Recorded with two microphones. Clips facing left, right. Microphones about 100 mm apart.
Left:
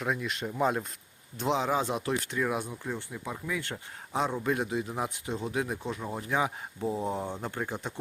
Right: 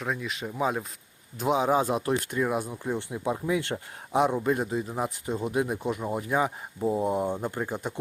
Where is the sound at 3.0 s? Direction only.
25° right (ahead or behind).